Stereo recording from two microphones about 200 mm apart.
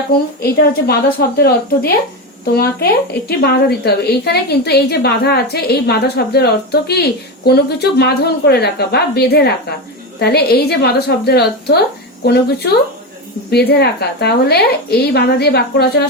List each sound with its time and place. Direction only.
0.4 s a woman's voice: 50° left (ahead or behind)